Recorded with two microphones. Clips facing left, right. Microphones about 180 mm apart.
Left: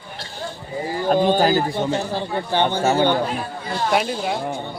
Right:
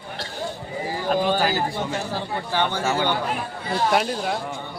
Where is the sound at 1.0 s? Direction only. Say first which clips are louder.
Left 5 dB; 30° left (ahead or behind).